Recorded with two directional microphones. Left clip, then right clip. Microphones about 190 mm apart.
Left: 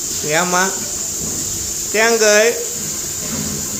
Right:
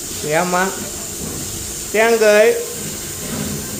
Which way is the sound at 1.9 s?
Centre (ahead or behind).